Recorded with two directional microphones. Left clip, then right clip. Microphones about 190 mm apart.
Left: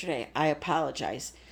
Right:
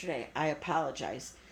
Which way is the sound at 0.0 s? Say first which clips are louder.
Left 5 dB; 55° left (ahead or behind).